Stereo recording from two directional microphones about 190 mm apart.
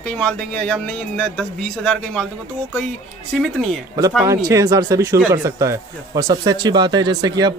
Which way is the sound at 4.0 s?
20° right (ahead or behind).